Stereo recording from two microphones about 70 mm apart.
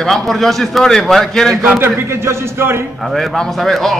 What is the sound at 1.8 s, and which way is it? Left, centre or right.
A man's voice, right.